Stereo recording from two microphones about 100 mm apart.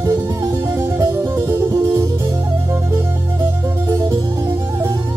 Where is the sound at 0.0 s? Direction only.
35° right (ahead or behind).